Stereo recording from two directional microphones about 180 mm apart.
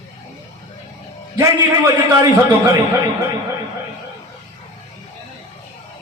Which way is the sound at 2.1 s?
15° right (ahead or behind).